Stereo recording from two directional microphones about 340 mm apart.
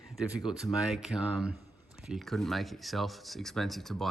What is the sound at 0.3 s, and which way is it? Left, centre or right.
Speech, centre.